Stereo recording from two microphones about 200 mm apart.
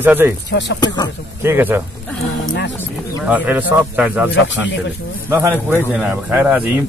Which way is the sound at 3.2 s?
10° right (ahead or behind).